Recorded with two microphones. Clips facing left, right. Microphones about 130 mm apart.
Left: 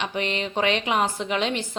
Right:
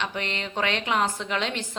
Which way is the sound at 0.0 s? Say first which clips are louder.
Left 4 dB; 15° left (ahead or behind).